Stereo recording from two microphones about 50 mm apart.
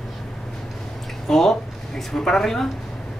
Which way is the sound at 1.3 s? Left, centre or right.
Centre.